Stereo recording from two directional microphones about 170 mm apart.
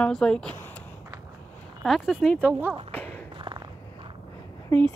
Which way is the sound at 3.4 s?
30° right (ahead or behind).